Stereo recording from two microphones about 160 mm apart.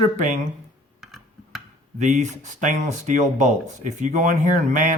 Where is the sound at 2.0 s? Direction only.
50° right (ahead or behind).